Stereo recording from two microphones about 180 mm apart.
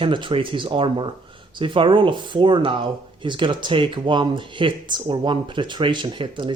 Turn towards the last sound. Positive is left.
turn(degrees=-25)  # may be behind; listen again after turning